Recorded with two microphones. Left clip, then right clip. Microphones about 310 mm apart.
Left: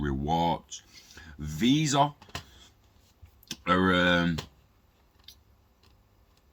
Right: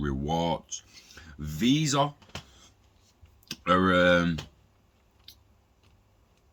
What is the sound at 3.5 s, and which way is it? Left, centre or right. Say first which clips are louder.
Speech: right 1 dB; centre.